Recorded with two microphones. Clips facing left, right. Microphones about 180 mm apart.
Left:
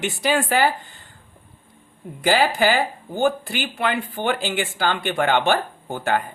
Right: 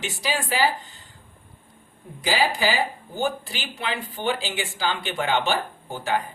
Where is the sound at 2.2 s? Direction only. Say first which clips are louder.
Left 5 dB; 55° left (ahead or behind).